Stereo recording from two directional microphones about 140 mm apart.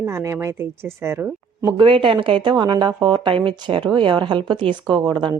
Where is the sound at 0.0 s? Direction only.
20° right (ahead or behind).